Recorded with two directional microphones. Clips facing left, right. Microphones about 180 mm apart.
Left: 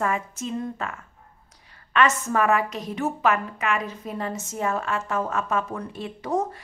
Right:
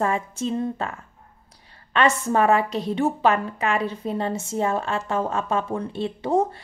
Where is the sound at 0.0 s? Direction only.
30° right (ahead or behind).